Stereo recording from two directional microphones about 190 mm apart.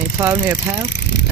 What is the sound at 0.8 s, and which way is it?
Vehicle, 60° left (ahead or behind).